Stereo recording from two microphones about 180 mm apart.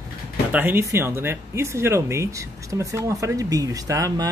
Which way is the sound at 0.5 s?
10° right (ahead or behind).